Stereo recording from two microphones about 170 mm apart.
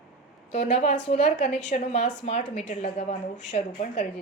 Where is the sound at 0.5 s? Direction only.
45° left (ahead or behind).